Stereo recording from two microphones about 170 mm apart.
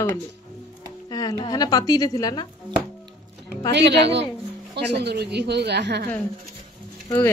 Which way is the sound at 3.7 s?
80° right.